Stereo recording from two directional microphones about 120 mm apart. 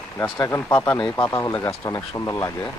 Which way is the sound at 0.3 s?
30° left (ahead or behind).